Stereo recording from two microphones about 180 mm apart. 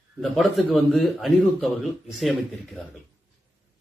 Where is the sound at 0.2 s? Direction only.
Centre (ahead or behind).